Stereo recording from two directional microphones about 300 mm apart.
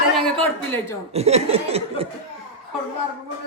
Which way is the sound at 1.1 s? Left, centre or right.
Right.